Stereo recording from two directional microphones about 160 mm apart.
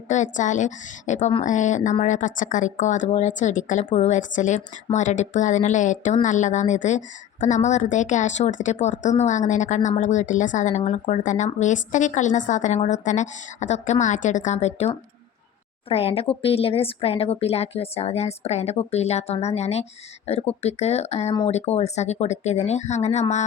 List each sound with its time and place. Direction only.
0.1 s a woman's voice: 50° left (ahead or behind)